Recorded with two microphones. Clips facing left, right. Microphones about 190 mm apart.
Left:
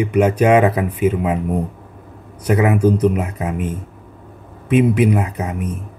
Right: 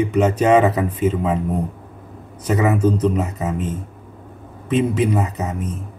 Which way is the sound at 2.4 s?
10° left (ahead or behind).